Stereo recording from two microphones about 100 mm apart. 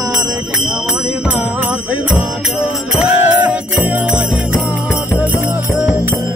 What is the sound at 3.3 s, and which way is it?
Jingle bell, 15° right (ahead or behind).